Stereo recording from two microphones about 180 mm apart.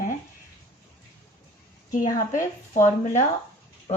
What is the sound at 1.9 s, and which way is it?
Speech, 45° left (ahead or behind).